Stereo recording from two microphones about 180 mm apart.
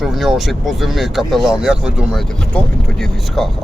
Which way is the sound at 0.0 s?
Centre (ahead or behind).